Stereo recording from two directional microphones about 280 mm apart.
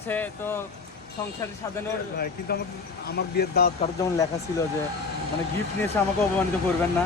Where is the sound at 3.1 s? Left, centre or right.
Left.